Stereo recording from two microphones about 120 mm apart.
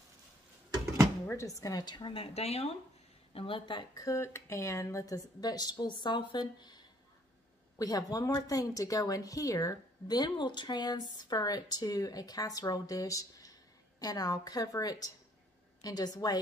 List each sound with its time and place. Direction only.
1.3 s a woman's voice: 25° left (ahead or behind); by 2.7 s 55° left (ahead or behind)
3.3 s speech: 45° left (ahead or behind)
4.0 s a woman's voice: 25° left (ahead or behind)